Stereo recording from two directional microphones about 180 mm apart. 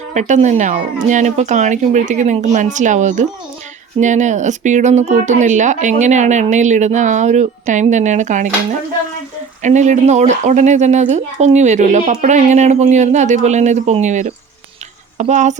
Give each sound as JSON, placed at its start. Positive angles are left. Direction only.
{"t": 0.1, "sound": "speech", "side_deg": -40}
{"t": 9.6, "sound": "speech", "side_deg": -40}